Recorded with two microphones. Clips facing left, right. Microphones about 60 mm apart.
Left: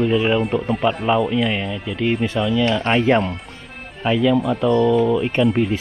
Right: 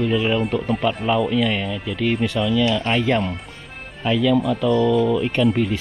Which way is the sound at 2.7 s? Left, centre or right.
Left.